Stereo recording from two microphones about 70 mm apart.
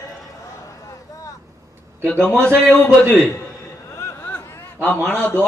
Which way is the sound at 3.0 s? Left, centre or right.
Left.